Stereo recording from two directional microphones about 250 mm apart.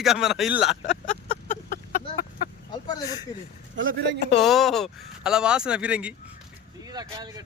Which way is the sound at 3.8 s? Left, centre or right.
Right.